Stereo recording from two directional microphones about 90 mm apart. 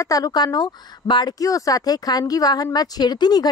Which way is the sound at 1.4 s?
40° left (ahead or behind).